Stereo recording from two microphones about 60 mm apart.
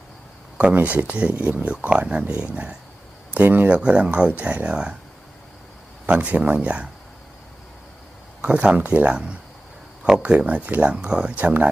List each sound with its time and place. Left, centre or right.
0.5 s speech: right
3.3 s speech: right
3.8 s speech: centre
6.1 s speech: right
8.4 s speech: right
11.3 s speech: right